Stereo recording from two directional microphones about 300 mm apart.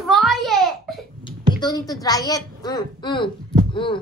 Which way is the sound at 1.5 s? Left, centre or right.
Centre.